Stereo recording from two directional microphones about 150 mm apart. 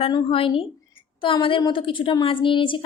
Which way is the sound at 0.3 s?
40° left (ahead or behind).